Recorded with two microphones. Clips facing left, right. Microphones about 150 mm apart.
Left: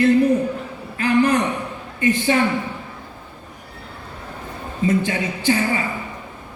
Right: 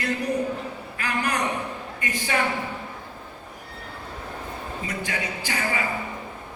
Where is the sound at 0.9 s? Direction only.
25° left (ahead or behind).